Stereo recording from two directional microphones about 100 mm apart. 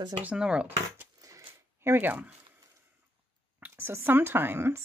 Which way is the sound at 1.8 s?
25° right (ahead or behind).